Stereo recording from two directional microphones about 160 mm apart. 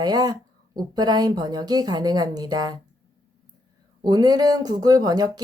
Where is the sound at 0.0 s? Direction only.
25° right (ahead or behind).